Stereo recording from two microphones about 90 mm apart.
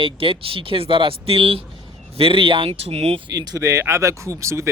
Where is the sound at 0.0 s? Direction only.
85° right.